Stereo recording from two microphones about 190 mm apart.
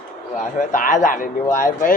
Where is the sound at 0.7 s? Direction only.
45° left (ahead or behind).